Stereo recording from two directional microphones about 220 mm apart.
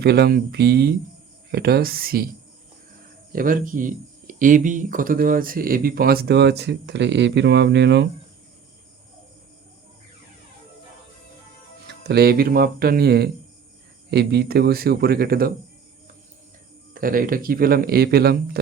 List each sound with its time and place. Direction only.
0.0 s speech: 45° right (ahead or behind)
3.3 s speech: 40° right (ahead or behind)
11.9 s speech: 50° right (ahead or behind)
16.9 s speech: 40° right (ahead or behind)